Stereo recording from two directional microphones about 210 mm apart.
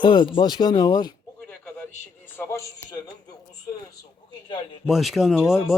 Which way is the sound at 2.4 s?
15° left (ahead or behind).